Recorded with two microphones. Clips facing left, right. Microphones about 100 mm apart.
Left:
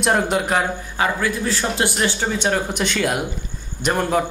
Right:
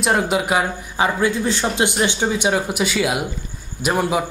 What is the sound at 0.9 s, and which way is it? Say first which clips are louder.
A man's voice: right 3 dB; 20° right (ahead or behind).